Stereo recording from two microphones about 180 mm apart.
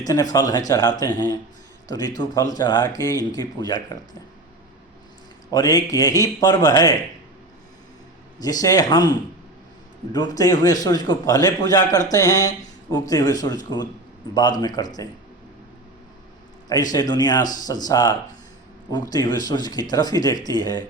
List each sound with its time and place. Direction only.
0.0 s a man's voice: 20° left (ahead or behind)
5.5 s a man's voice: 20° left (ahead or behind)
8.4 s a man's voice: 20° left (ahead or behind)
16.6 s a man's voice: 20° left (ahead or behind)
19.1 s a man's voice: 20° left (ahead or behind)